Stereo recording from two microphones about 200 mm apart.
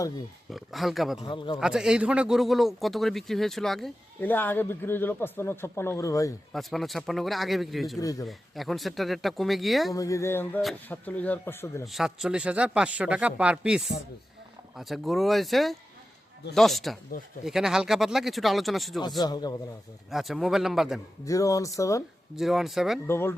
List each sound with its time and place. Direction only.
0.5 s speech: centre (ahead or behind)
1.2 s speech: 25° left (ahead or behind)
1.5 s speech: 5° right (ahead or behind); by 6.3 s 15° left (ahead or behind)
6.5 s speech: centre (ahead or behind)
7.9 s speech: 15° left (ahead or behind)
8.3 s speech: centre (ahead or behind)
9.9 s speech: 15° left (ahead or behind)
11.9 s speech: centre (ahead or behind)
19.2 s speech: 20° left (ahead or behind)
20.1 s speech: centre (ahead or behind)
21.2 s speech: 15° left (ahead or behind)
22.4 s speech: centre (ahead or behind)
23.0 s speech: 10° left (ahead or behind)